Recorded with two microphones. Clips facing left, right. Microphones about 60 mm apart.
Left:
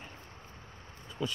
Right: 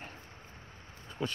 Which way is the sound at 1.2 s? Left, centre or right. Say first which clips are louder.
Even; right.